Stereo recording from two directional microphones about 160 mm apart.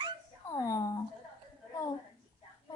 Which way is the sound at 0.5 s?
20° left (ahead or behind).